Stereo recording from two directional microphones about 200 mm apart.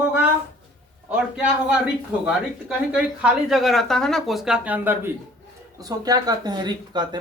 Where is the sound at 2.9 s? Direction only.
5° right (ahead or behind).